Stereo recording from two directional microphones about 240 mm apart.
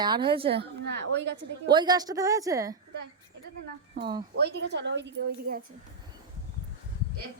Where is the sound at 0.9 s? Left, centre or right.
Right.